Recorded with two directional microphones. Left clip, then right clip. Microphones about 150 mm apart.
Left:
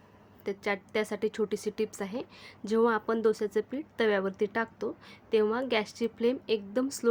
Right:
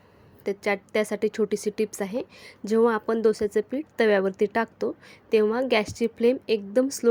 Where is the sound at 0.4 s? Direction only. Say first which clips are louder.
Right 6 dB; 30° right (ahead or behind).